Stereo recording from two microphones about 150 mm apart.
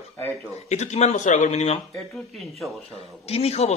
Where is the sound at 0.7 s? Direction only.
50° left (ahead or behind).